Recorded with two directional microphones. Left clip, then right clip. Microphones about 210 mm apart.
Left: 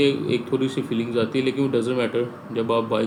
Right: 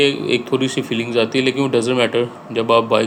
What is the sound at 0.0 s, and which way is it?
Speech, 15° right (ahead or behind).